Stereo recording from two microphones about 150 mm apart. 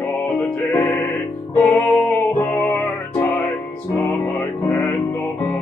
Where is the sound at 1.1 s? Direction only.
5° left (ahead or behind).